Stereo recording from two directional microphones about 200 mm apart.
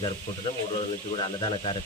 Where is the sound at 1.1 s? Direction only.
30° left (ahead or behind).